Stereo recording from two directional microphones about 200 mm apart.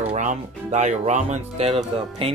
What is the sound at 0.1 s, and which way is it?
Speech, 40° right (ahead or behind).